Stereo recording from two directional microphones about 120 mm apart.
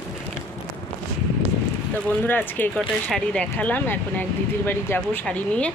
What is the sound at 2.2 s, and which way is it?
Speech, 15° left (ahead or behind).